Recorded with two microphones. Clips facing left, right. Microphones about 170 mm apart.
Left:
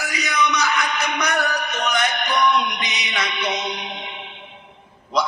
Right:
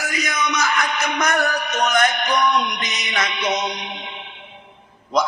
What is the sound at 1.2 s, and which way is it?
Music, 45° right (ahead or behind).